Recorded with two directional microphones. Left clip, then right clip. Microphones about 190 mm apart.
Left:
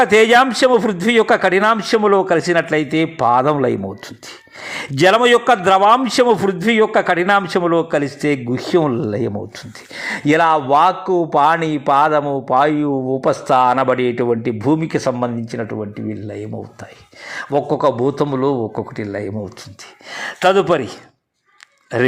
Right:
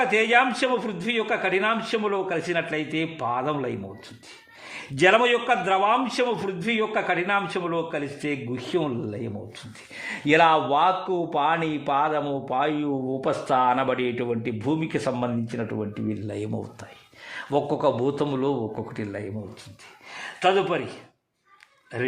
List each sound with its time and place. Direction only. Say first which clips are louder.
0.0 s a man's voice: left 9 dB; 35° left (ahead or behind); by 16.6 s centre (ahead or behind)
17.5 s a man's voice: left 7 dB; 20° left (ahead or behind)
20.1 s a man's voice: left 8 dB; 35° left (ahead or behind)